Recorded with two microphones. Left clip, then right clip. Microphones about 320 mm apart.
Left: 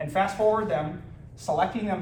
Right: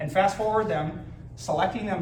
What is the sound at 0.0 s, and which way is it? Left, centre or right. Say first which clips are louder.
A man's voice: even; centre.